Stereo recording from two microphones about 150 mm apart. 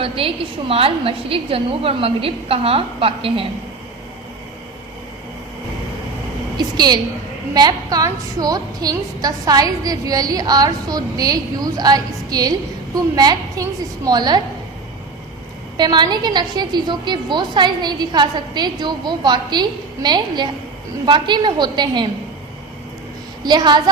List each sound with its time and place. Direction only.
0.0 s a woman's voice: 40° right (ahead or behind)
6.6 s a woman's voice: 30° right (ahead or behind)
15.8 s a woman's voice: 30° right (ahead or behind)
23.4 s a woman's voice: 30° right (ahead or behind)